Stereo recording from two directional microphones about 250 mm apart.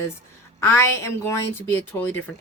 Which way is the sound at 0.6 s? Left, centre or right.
Centre.